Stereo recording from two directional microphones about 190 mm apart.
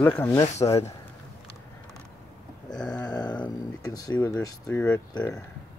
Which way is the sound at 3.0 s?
20° left (ahead or behind).